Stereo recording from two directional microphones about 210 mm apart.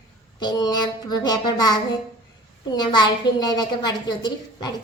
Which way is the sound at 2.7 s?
20° left (ahead or behind).